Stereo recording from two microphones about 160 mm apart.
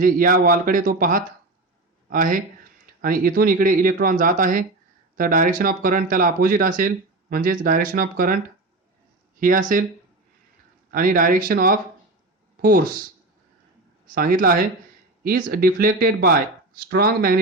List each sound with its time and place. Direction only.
0.0 s speech: 60° right (ahead or behind)
9.4 s speech: 60° right (ahead or behind)
10.9 s speech: 60° right (ahead or behind)
14.1 s speech: 60° right (ahead or behind)